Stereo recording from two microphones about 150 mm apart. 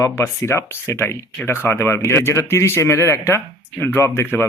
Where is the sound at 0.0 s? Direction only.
15° left (ahead or behind).